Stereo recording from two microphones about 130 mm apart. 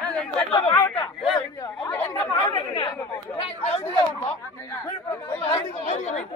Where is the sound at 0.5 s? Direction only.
30° left (ahead or behind).